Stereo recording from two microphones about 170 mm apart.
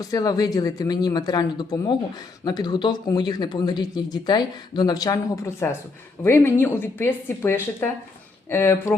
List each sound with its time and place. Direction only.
0.0 s speech: 20° left (ahead or behind)